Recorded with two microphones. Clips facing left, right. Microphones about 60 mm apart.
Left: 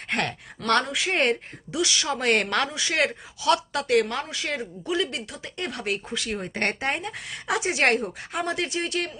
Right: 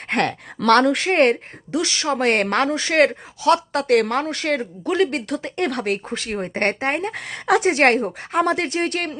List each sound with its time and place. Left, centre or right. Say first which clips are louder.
0.1 s speech: right 6 dB; right
4.1 s speech: right 8 dB; right
6.1 s speech: right 4 dB; right
7.1 s speech: right 9 dB; right
8.4 s speech: right 8 dB; right